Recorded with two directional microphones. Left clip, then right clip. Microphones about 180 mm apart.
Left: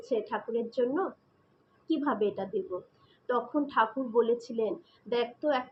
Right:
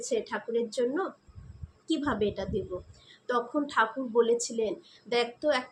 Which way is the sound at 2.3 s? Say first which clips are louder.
Even; 30° right (ahead or behind).